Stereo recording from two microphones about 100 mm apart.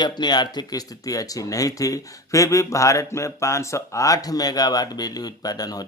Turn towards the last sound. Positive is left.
turn(degrees=40)  # may be behind; listen again after turning